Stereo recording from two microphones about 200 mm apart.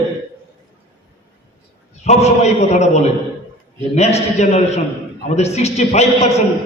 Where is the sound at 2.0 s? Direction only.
35° left (ahead or behind).